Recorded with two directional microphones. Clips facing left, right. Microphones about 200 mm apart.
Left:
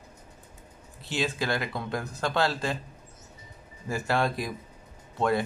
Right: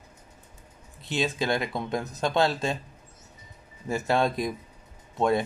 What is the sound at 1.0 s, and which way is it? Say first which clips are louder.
Speech: right 2 dB; 20° right (ahead or behind).